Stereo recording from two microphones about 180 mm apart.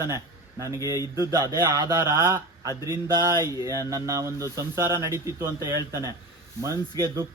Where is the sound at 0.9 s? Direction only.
15° right (ahead or behind).